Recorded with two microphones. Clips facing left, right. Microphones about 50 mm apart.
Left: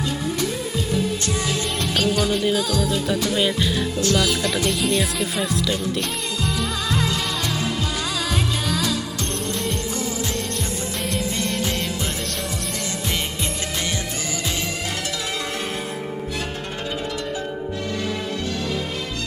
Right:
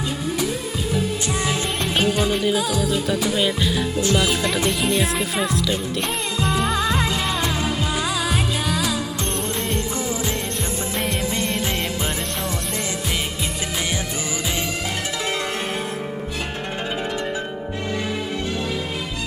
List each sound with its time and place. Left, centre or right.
1.2 s music: centre
2.4 s music: centre
4.0 s music: centre
4.7 s speech: centre
6.4 s music: right; by 9.0 s centre
10.9 s music: centre